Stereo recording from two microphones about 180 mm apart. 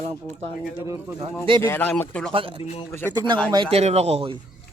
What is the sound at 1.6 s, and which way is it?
Speech, 10° left (ahead or behind).